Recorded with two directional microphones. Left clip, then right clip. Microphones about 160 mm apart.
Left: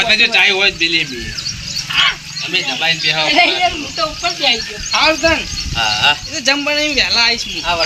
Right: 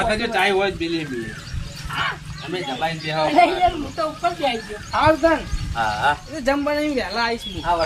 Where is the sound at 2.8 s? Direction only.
Centre (ahead or behind).